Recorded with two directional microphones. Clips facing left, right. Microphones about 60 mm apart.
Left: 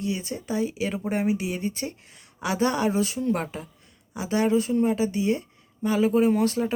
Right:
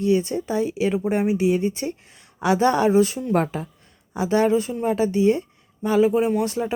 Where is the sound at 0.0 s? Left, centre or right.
Right.